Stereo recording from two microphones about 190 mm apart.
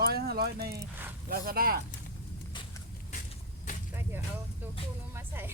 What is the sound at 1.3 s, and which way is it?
Speech, 50° right (ahead or behind).